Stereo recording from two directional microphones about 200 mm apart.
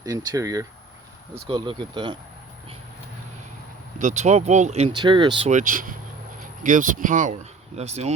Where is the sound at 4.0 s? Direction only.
35° right (ahead or behind).